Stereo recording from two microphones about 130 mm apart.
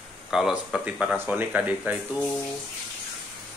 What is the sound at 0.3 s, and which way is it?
Speech, 5° right (ahead or behind).